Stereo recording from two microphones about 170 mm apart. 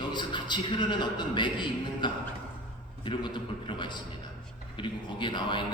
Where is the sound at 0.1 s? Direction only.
25° left (ahead or behind).